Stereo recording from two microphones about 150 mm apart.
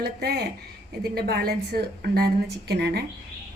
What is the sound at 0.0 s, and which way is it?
A woman's voice, 90° right.